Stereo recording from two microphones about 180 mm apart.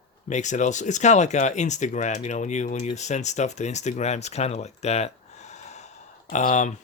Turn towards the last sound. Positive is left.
turn(degrees=40)  # may be behind; listen again after turning